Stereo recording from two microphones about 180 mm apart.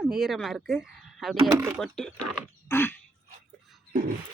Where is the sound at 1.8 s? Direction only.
5° left (ahead or behind).